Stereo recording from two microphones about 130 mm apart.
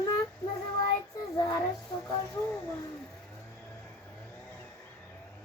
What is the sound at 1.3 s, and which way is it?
Child singing, 30° left (ahead or behind).